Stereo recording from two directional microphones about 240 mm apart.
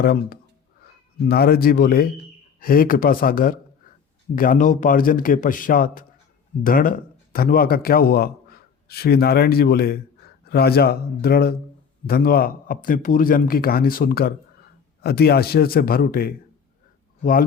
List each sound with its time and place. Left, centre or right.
0.0 s a man's voice: left